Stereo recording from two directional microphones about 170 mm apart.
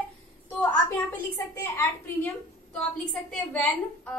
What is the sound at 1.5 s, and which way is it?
Speech, 15° left (ahead or behind).